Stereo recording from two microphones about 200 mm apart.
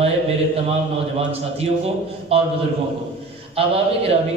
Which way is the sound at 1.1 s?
30° right (ahead or behind).